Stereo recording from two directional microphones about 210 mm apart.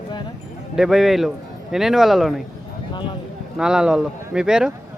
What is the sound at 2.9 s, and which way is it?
Clip-clop, 25° left (ahead or behind).